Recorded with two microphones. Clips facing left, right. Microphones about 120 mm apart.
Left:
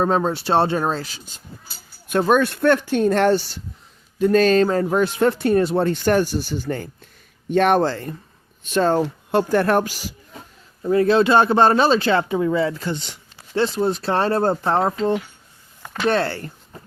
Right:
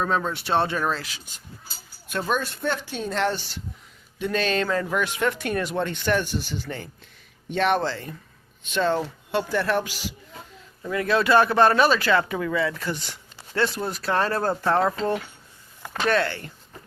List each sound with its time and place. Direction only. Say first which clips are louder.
0.0 s speech: left 6 dB; 35° left (ahead or behind)
2.0 s speech: left 9 dB; 50° left (ahead or behind)
10.8 s speech: left 6 dB; 30° left (ahead or behind)